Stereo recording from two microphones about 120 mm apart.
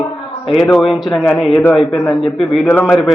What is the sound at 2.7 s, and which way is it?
Speech, 15° left (ahead or behind).